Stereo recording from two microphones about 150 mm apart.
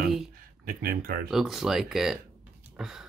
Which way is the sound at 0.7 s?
80° right.